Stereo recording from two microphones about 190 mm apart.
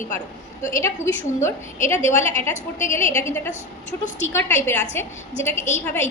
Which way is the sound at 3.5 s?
40° left (ahead or behind).